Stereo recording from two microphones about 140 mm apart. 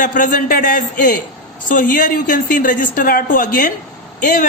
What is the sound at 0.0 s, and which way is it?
A man's voice, 70° left (ahead or behind).